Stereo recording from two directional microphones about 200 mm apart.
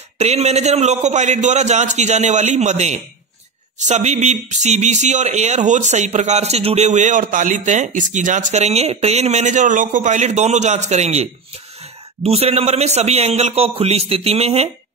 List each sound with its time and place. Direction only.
0.2 s speech: 35° right (ahead or behind)